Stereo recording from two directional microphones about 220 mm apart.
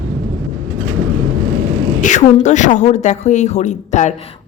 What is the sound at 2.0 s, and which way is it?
Speech, 35° left (ahead or behind).